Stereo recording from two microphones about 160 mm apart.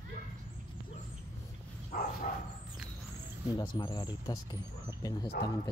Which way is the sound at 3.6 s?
30° left (ahead or behind).